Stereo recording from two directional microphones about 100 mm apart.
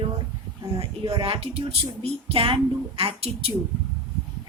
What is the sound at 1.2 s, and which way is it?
A woman's voice, 70° right (ahead or behind).